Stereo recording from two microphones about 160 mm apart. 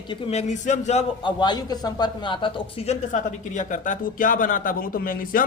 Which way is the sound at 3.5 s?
55° left (ahead or behind).